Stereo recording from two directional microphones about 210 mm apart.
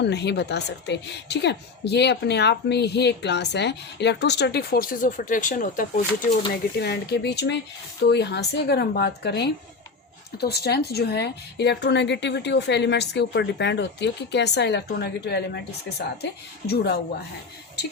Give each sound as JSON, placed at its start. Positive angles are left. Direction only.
{"t": 0.0, "sound": "speech", "side_deg": 55}
{"t": 6.7, "sound": "speech", "side_deg": 50}